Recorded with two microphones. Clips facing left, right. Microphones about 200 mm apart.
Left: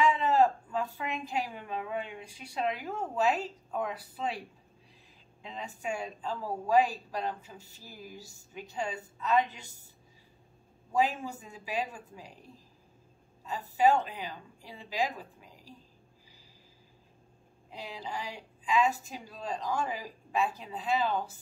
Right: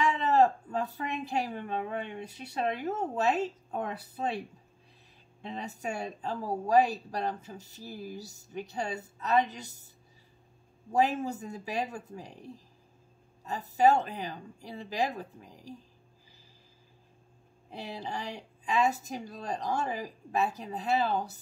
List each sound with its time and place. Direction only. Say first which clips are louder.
0.2 s speech: right 1 dB; 40° right (ahead or behind)
2.9 s speech: even; 20° right (ahead or behind)
3.7 s a woman's voice: even; 40° right (ahead or behind)
5.4 s a woman's voice: right 2 dB; 40° right (ahead or behind)
10.9 s a woman's voice: right 2 dB; 40° right (ahead or behind)
13.5 s a woman's voice: right 1 dB; 40° right (ahead or behind)
17.9 s a woman's voice: right 1 dB; 40° right (ahead or behind)